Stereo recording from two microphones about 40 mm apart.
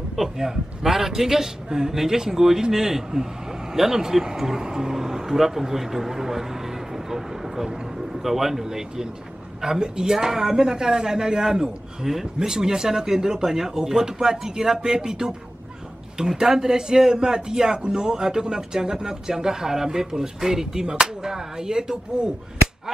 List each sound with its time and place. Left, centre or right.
0.1 s a man's voice: centre